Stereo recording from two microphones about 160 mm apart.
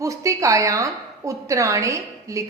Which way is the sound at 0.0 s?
20° right (ahead or behind).